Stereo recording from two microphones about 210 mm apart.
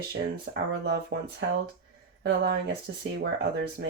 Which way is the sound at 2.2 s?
50° right (ahead or behind).